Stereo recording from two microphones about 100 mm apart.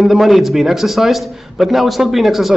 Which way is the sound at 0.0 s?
Centre (ahead or behind).